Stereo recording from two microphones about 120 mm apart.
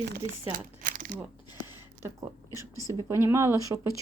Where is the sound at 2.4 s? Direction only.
30° left (ahead or behind).